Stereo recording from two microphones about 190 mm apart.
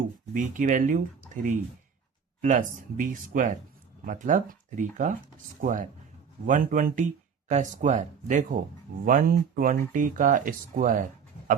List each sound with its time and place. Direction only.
0.3 s speech: 40° right (ahead or behind)